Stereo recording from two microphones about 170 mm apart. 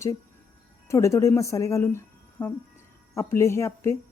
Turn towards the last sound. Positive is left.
turn(degrees=15)  # may be behind; listen again after turning